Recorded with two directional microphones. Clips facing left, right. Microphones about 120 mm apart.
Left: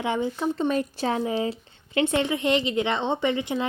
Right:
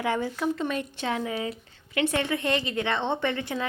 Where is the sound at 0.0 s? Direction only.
20° left (ahead or behind).